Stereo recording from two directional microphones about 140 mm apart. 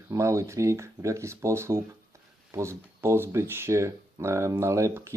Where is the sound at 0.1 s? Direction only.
20° right (ahead or behind).